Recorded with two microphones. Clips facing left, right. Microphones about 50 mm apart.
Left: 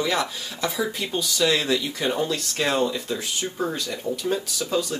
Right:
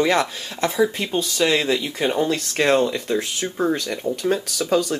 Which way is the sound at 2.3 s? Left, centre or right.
Right.